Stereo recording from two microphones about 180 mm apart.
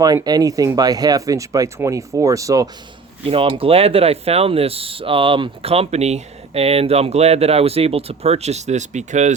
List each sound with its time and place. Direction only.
0.0 s speech: 20° right (ahead or behind)
3.2 s speech: 30° right (ahead or behind)